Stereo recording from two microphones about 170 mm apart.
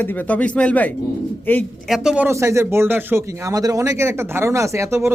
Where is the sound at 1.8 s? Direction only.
5° right (ahead or behind).